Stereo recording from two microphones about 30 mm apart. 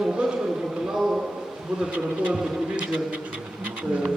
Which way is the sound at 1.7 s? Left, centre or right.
Right.